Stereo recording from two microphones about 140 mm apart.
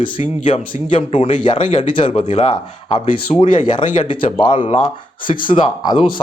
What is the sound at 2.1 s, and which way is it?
Speech, 55° left (ahead or behind).